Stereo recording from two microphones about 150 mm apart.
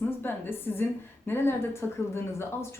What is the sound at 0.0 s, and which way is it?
A woman's voice, 15° left (ahead or behind).